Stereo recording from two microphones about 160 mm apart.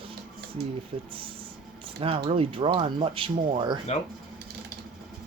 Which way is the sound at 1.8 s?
35° right (ahead or behind).